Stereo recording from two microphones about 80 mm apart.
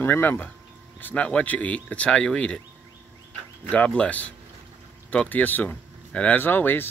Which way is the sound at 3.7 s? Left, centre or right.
Centre.